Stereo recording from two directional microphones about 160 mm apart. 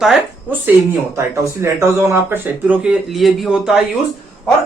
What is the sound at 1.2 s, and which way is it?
Speech, 15° right (ahead or behind).